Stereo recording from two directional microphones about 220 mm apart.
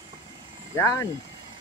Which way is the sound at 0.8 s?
15° left (ahead or behind).